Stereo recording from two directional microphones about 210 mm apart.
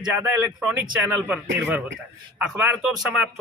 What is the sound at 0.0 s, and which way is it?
Speech, 10° right (ahead or behind).